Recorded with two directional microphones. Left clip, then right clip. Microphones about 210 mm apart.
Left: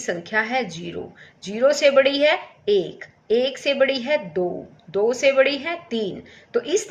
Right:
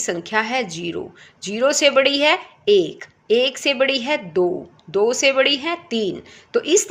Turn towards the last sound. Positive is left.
turn(degrees=-45)  # may be behind; listen again after turning